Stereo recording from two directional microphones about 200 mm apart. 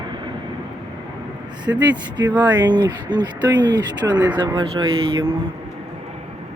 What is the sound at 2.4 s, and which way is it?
Speech, 20° right (ahead or behind).